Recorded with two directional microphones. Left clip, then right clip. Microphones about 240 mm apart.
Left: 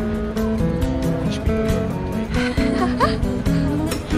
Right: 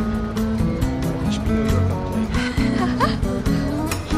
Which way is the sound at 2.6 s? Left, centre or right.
Centre.